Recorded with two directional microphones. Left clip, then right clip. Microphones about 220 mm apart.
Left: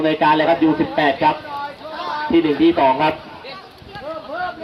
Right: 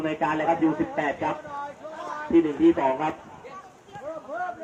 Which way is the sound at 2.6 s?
35° left (ahead or behind).